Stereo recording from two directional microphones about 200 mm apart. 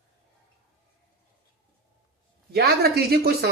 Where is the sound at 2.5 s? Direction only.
50° right (ahead or behind).